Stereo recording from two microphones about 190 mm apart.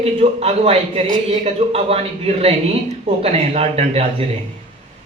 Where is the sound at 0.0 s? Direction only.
30° right (ahead or behind).